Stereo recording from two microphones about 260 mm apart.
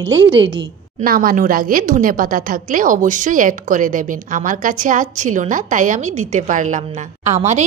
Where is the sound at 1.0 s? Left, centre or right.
Right.